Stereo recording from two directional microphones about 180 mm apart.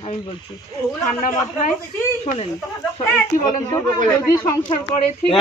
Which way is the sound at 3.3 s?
50° left (ahead or behind).